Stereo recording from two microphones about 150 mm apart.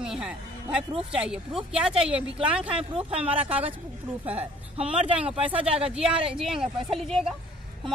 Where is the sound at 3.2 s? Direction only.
40° right (ahead or behind).